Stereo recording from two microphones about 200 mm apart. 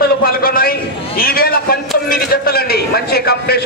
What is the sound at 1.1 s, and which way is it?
A man's voice, 50° left (ahead or behind).